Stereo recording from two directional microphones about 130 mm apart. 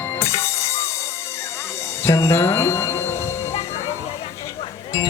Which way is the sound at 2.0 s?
20° left (ahead or behind).